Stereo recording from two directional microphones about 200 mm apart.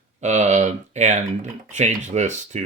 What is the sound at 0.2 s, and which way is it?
Speech, 35° right (ahead or behind).